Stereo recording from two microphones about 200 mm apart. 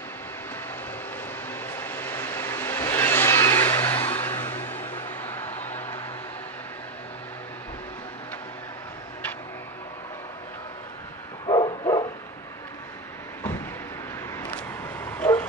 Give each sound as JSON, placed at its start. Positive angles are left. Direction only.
{"t": 1.5, "sound": "vehicle", "side_deg": 10}
{"t": 11.4, "sound": "bow-wow", "side_deg": 25}
{"t": 14.4, "sound": "a sound", "side_deg": 10}